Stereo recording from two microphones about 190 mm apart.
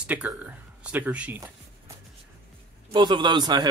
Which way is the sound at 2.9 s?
25° right (ahead or behind).